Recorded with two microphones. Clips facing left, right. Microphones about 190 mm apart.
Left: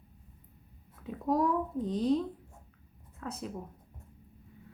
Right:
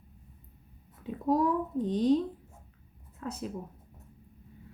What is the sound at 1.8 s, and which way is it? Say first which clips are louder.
Speech: right 4 dB; 35° right (ahead or behind).